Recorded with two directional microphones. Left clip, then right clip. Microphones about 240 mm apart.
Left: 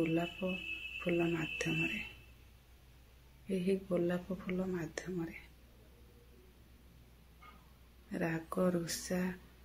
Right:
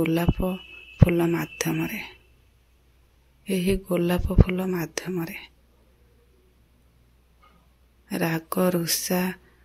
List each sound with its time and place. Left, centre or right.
0.0 s speech: right
3.4 s speech: right
8.1 s speech: right